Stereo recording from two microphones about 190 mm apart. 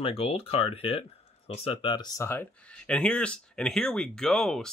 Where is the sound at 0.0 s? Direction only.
30° left (ahead or behind).